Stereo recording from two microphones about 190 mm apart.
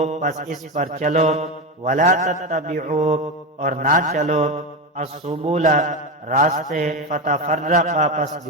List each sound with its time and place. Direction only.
0.0 s a man's voice: 40° right (ahead or behind)
2.7 s mantra: 45° right (ahead or behind)
5.5 s a man's voice: 40° right (ahead or behind)